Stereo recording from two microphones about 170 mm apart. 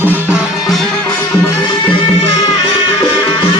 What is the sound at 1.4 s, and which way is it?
Music, 25° left (ahead or behind).